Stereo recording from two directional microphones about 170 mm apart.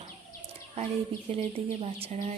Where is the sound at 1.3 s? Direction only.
35° right (ahead or behind).